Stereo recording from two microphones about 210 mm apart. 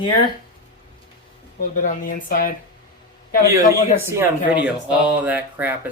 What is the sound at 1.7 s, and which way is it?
Speech, 40° left (ahead or behind).